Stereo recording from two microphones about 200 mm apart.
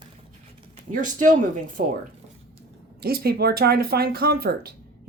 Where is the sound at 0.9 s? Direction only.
40° right (ahead or behind).